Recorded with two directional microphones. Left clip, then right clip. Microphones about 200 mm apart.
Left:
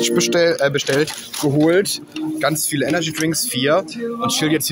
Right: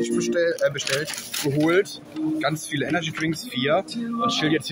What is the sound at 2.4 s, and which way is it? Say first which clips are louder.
Speech: left 9 dB; 40° left (ahead or behind).